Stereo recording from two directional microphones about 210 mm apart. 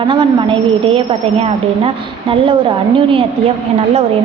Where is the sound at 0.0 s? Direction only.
25° right (ahead or behind).